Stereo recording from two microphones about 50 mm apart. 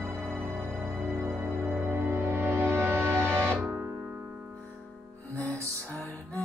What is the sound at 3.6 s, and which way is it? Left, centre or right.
Music, right.